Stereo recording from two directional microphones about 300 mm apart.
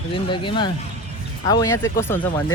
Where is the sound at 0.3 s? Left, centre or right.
Centre.